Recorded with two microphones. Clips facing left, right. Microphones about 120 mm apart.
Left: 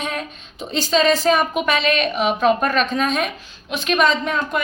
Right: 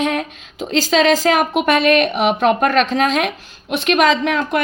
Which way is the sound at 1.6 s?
55° right (ahead or behind).